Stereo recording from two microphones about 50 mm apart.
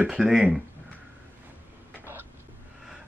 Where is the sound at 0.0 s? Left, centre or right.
Centre.